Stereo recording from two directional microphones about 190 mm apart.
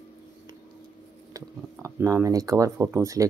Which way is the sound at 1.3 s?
15° right (ahead or behind).